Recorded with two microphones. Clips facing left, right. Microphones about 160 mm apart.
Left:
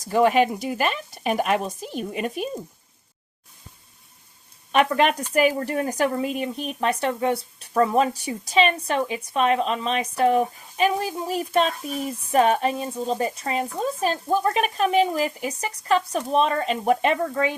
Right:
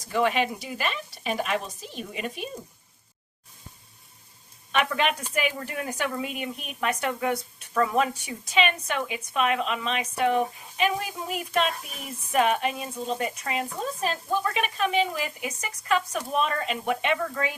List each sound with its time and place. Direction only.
0.0 s speech: 45° left (ahead or behind)
4.7 s a woman's voice: 40° left (ahead or behind)